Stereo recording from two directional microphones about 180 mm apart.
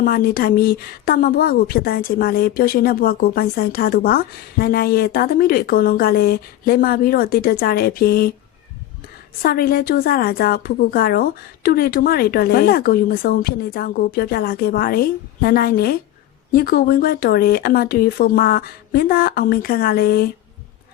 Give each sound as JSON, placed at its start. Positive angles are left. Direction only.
{"t": 0.0, "sound": "a woman's voice", "side_deg": 55}
{"t": 9.4, "sound": "a woman's voice", "side_deg": 55}